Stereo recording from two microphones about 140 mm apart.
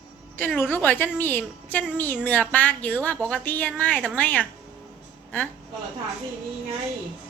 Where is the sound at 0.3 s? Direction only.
10° left (ahead or behind).